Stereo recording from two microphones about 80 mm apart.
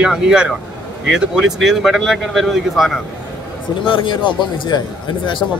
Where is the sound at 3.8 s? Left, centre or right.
Left.